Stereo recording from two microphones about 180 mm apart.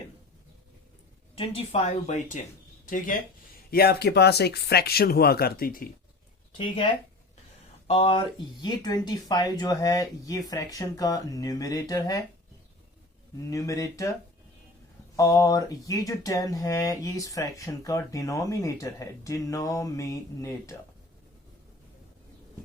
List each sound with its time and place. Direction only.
1.4 s speech: 30° left (ahead or behind); by 3.2 s 50° left (ahead or behind)
3.7 s speech: 60° left (ahead or behind)
7.9 s speech: 30° left (ahead or behind)
13.5 s speech: 20° left (ahead or behind)